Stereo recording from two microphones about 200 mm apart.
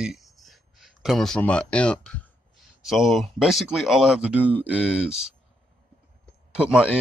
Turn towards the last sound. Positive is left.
turn(degrees=-5)  # may be behind; listen again after turning